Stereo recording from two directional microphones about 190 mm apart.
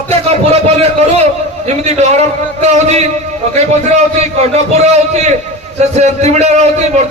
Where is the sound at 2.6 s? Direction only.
35° right (ahead or behind).